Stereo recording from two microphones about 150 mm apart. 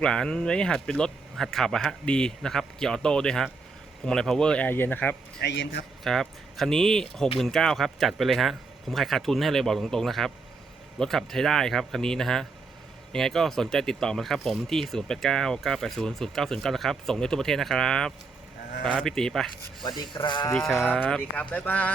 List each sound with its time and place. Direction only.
0.0 s speech: 5° left (ahead or behind)
5.4 s a man's voice: 90° left
6.1 s speech: 5° left (ahead or behind)
19.8 s speech: 30° left (ahead or behind)
20.5 s speech: 5° left (ahead or behind)